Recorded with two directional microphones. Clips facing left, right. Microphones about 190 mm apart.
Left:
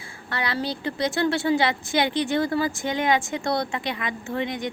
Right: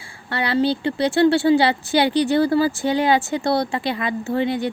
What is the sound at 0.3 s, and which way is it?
A woman's voice, 30° right (ahead or behind).